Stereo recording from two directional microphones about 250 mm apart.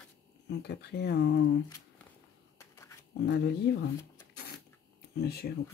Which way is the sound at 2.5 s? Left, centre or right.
Centre.